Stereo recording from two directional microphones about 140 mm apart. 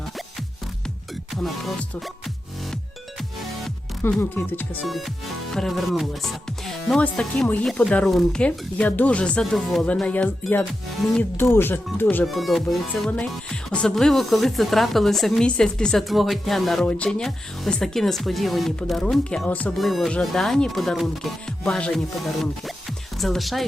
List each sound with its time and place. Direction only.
1.4 s speech: centre (ahead or behind)
4.2 s speech: 15° left (ahead or behind)
4.9 s speech: centre (ahead or behind)
11.3 s speech: 15° left (ahead or behind)
12.2 s speech: centre (ahead or behind)